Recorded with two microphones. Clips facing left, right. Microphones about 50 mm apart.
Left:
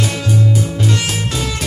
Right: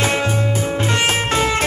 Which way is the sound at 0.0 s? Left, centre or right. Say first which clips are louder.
Even; right.